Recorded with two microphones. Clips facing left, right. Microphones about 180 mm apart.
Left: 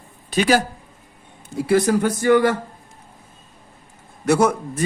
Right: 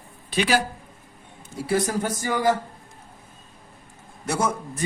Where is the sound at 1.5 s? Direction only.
65° left (ahead or behind).